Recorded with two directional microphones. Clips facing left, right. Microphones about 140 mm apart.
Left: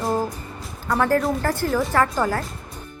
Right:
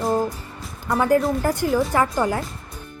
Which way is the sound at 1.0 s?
15° right (ahead or behind).